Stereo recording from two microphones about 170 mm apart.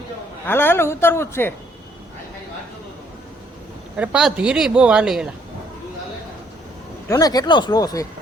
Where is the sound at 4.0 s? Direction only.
5° right (ahead or behind).